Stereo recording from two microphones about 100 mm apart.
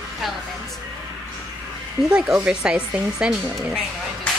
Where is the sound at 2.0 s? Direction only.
10° right (ahead or behind).